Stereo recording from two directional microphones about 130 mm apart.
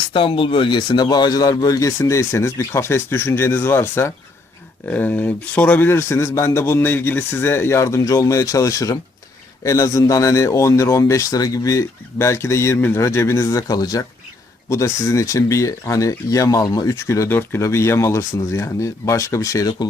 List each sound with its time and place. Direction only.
0.1 s a man's voice: 45° left (ahead or behind)